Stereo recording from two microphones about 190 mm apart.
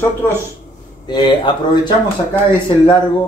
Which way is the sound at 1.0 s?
25° left (ahead or behind).